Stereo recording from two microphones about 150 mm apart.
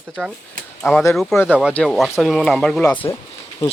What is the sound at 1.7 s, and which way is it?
Speech, 5° left (ahead or behind).